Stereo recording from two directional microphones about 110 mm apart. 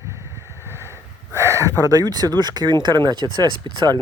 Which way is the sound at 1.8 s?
35° right (ahead or behind).